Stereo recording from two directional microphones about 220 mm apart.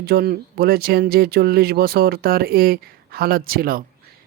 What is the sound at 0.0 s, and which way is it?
Speech, 45° right (ahead or behind).